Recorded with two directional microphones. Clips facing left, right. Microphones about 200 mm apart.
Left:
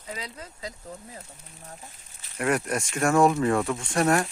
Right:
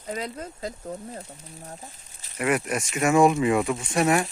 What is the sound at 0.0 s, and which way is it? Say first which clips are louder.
Speech: right 6 dB; 50° right (ahead or behind).